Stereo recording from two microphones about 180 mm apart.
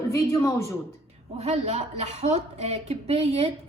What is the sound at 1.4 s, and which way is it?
A woman's voice, 40° right (ahead or behind).